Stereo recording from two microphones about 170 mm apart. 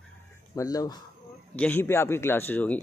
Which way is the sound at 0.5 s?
20° left (ahead or behind).